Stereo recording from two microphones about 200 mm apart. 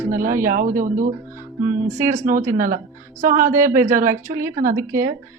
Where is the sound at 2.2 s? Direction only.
40° right (ahead or behind).